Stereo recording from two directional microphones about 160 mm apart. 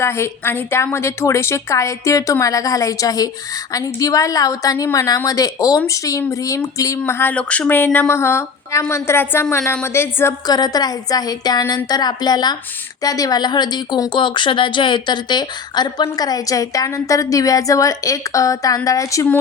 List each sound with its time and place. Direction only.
0.0 s a woman's voice: 15° left (ahead or behind)